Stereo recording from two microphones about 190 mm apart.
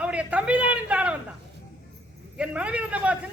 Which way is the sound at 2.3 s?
5° right (ahead or behind).